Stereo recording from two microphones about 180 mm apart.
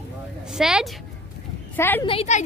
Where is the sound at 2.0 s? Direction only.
35° left (ahead or behind).